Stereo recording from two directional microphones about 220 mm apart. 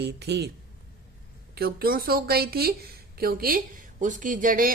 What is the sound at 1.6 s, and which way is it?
A woman's voice, 40° right (ahead or behind).